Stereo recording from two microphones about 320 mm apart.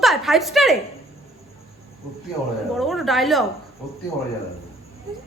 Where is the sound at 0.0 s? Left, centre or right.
Centre.